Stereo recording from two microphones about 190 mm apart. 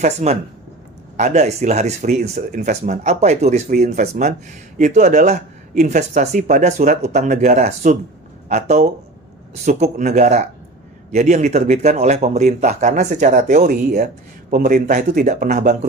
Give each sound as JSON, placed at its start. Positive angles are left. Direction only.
{"t": 0.0, "sound": "speech", "side_deg": -35}